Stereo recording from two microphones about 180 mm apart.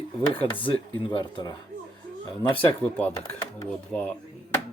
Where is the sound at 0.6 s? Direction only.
25° left (ahead or behind).